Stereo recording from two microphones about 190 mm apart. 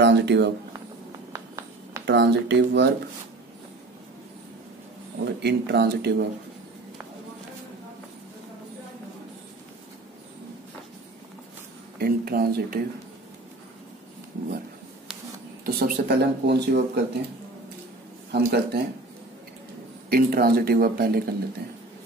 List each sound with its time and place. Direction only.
0.0 s speech: 65° right (ahead or behind)
1.3 s a sound: 15° right (ahead or behind)
2.0 s speech: 60° right (ahead or behind)
5.2 s speech: 60° right (ahead or behind)
12.0 s speech: 55° right (ahead or behind)
15.6 s speech: 55° right (ahead or behind)
18.3 s speech: 60° right (ahead or behind)
20.1 s speech: 50° right (ahead or behind)